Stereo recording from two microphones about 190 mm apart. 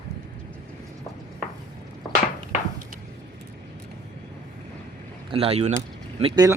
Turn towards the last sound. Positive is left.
turn(degrees=-20)  # may be behind; listen again after turning